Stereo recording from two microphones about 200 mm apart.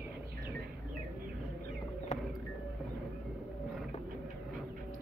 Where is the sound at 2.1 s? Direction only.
35° left (ahead or behind).